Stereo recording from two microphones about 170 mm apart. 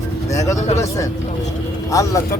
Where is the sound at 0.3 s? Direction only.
20° left (ahead or behind).